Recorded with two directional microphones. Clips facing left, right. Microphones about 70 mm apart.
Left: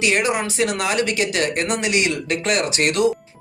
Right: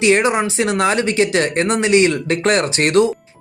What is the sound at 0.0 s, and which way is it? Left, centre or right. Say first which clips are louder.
Speech: right 5 dB; right.